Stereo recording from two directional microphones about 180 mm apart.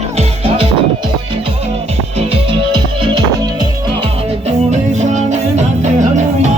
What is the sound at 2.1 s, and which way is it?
Music, 30° right (ahead or behind).